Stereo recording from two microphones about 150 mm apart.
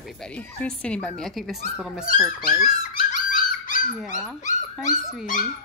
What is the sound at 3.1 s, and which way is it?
Dog, 60° left (ahead or behind).